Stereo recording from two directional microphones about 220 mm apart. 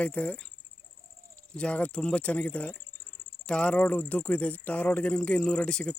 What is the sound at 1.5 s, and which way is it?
Speech, 5° left (ahead or behind).